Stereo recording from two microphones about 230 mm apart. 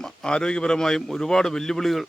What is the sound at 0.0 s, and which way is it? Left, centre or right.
Speech, centre.